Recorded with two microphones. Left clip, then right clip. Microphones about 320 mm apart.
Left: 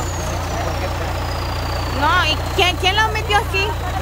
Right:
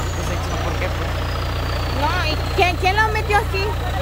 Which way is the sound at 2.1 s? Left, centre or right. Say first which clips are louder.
Left 3 dB; centre.